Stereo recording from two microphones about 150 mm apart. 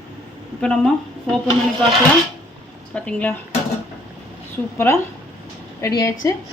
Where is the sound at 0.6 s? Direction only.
5° left (ahead or behind).